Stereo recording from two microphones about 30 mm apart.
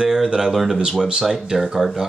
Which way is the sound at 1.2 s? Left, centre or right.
Centre.